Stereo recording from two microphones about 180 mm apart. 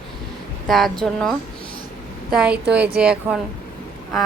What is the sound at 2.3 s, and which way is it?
A woman's voice, 5° right (ahead or behind).